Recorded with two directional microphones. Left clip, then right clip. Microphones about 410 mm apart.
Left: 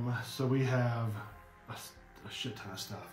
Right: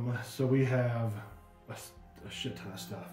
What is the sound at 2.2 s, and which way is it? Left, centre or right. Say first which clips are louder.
Speech: even; centre.